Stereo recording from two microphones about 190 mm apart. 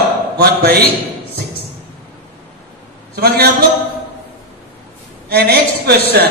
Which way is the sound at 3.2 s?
55° right (ahead or behind).